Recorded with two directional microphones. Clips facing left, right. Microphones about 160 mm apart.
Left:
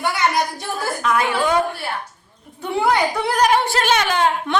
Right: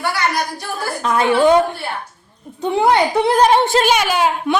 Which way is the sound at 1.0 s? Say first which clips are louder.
Right 6 dB; 30° right (ahead or behind).